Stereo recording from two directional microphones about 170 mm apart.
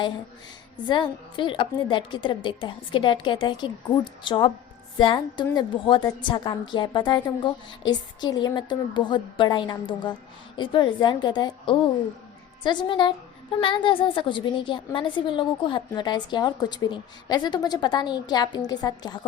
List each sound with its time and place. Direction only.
0.9 s a woman's voice: 30° left (ahead or behind)